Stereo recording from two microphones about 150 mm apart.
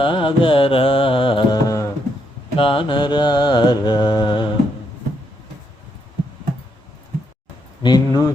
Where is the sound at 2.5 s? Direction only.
35° left (ahead or behind).